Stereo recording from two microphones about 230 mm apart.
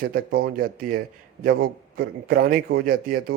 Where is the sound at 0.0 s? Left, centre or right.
Right.